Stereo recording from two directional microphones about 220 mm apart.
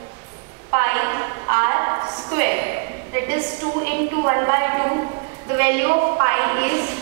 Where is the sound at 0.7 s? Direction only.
15° right (ahead or behind).